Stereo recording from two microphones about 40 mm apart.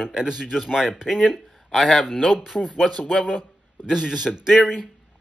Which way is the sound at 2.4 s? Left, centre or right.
Centre.